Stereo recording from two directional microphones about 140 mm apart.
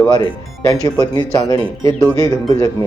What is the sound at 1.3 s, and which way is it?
Speech, 30° left (ahead or behind).